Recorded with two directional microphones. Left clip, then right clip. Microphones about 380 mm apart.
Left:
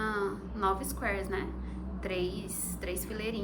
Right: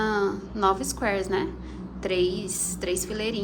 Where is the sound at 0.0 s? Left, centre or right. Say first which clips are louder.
Right 8 dB; centre.